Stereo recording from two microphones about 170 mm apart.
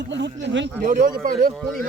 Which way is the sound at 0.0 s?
85° right.